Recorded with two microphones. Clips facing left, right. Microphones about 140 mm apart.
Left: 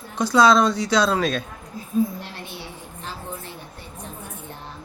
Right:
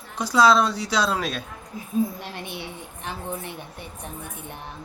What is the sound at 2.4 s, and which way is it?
A woman's voice, 60° right (ahead or behind).